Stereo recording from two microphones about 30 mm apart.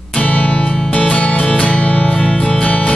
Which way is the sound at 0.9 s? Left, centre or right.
Left.